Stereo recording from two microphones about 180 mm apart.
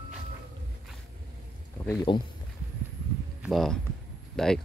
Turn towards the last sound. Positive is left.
turn(degrees=0)  # may be behind; listen again after turning